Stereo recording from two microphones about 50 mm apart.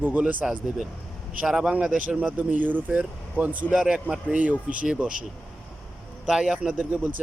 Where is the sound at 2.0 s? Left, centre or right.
Right.